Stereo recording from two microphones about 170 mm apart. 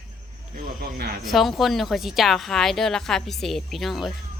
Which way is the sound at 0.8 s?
65° right (ahead or behind).